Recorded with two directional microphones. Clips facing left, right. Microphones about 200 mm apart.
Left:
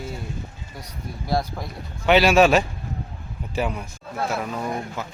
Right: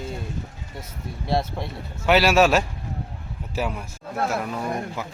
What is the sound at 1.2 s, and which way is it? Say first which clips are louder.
Speech: even; 25° right (ahead or behind).